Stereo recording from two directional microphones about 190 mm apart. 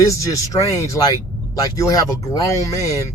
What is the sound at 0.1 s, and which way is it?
Speech, 15° left (ahead or behind).